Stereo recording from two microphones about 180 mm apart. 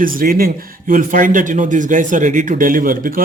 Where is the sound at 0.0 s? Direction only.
50° right (ahead or behind).